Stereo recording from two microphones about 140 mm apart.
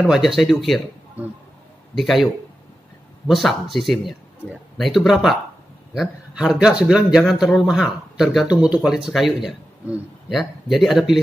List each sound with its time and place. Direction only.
0.0 s speech: centre (ahead or behind)
2.0 s speech: centre (ahead or behind)
3.3 s speech: centre (ahead or behind)